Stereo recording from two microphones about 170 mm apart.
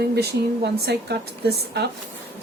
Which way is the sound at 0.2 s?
75° right (ahead or behind).